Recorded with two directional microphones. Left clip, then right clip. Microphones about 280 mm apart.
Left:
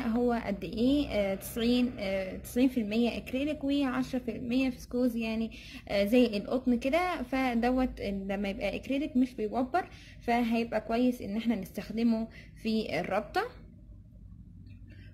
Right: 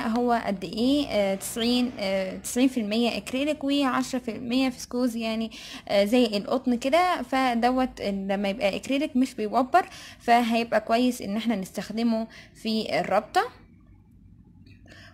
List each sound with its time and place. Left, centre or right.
0.0 s a woman's voice: right